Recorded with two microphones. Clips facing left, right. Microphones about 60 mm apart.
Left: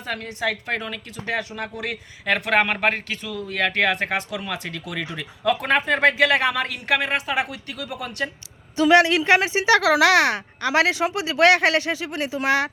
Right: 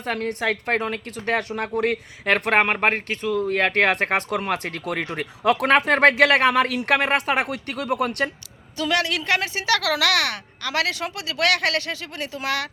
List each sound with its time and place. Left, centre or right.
0.1 s speech: right
2.5 s speech: right
5.5 s speech: right
8.8 s speech: left